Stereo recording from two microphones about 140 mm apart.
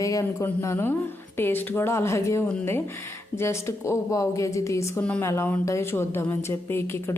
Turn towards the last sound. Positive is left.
turn(degrees=15)  # may be behind; listen again after turning